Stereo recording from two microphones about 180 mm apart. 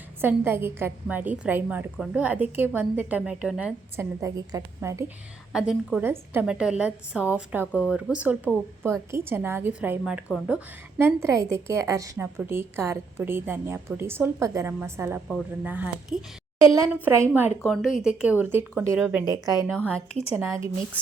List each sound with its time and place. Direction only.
0.2 s a woman's voice: 10° right (ahead or behind)
3.9 s a woman's voice: 20° right (ahead or behind)
5.5 s a woman's voice: 5° right (ahead or behind)
7.7 s speech: 10° left (ahead or behind)
7.9 s a woman's voice: 5° right (ahead or behind)
19.7 s speech: 5° left (ahead or behind)
20.3 s a woman's voice: 15° right (ahead or behind)